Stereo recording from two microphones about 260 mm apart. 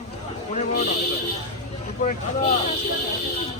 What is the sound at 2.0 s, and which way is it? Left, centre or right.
Speech, left.